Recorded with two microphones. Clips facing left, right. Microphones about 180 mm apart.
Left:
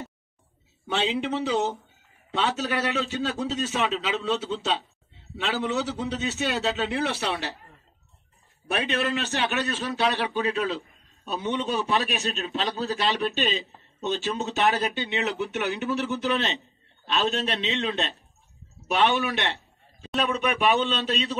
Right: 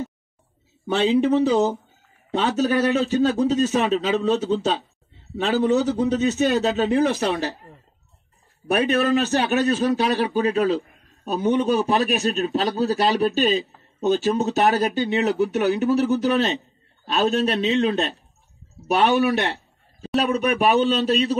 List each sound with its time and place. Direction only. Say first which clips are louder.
0.8 s speech: right 8 dB; 40° right (ahead or behind)
8.7 s speech: right 7 dB; 40° right (ahead or behind)